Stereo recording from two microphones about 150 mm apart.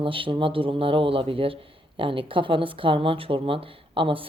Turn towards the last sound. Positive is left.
turn(degrees=-35)  # may be behind; listen again after turning